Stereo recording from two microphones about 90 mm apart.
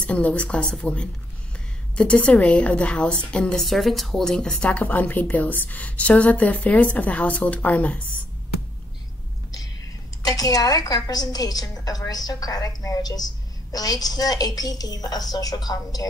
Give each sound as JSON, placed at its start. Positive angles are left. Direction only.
{"t": 0.0, "sound": "speech", "side_deg": 15}
{"t": 10.2, "sound": "a woman's voice", "side_deg": 45}